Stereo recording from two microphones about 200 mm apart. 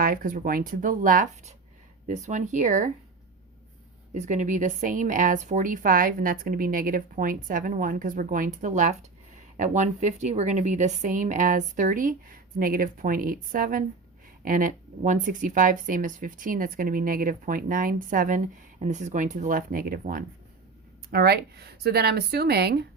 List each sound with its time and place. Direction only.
0.0 s a woman's voice: 45° right (ahead or behind)
4.1 s a woman's voice: 35° right (ahead or behind); by 22.8 s 55° right (ahead or behind)